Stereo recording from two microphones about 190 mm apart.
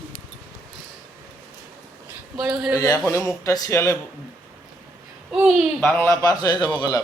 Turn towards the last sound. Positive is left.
turn(degrees=20)  # may be behind; listen again after turning